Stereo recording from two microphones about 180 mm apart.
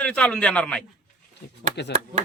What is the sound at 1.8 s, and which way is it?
Speech, 70° left (ahead or behind).